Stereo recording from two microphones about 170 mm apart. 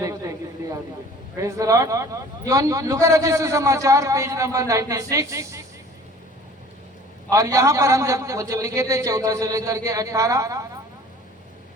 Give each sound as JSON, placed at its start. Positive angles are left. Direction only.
{"t": 0.0, "sound": "a sound", "side_deg": -20}
{"t": 1.4, "sound": "a man's voice", "side_deg": -20}
{"t": 7.3, "sound": "a man's voice", "side_deg": -20}